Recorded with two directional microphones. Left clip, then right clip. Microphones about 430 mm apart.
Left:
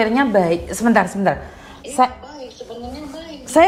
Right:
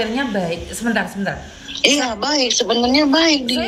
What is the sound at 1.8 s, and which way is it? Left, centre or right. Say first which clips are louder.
A woman's voice: right 2 dB; right.